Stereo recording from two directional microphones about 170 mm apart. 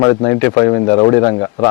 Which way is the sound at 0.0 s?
20° left (ahead or behind).